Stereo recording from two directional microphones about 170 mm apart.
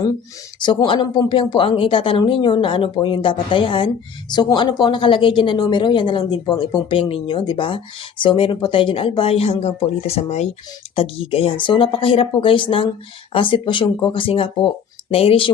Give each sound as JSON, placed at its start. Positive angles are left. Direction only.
{"t": 0.6, "sound": "speech", "side_deg": 25}